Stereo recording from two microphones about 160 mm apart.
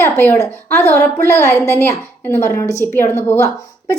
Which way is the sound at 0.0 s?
15° left (ahead or behind).